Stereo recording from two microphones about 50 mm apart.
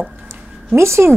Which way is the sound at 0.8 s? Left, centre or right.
Right.